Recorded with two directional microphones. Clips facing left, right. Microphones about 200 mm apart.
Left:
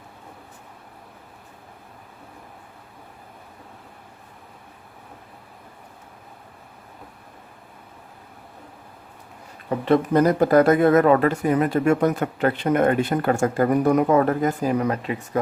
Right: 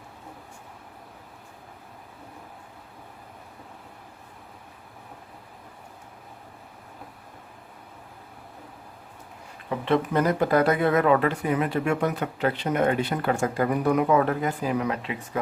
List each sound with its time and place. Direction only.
9.6 s speech: 40° left (ahead or behind)